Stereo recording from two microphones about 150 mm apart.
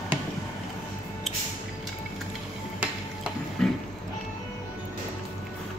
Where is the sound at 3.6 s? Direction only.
5° left (ahead or behind).